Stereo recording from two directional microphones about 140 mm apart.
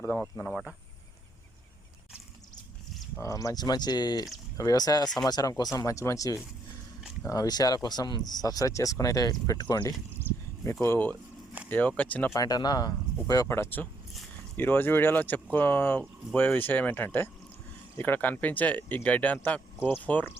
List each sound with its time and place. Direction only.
0.0 s speech: 15° left (ahead or behind)
3.2 s speech: 25° left (ahead or behind)
10.8 s speech: 15° left (ahead or behind)
12.4 s speech: 30° left (ahead or behind)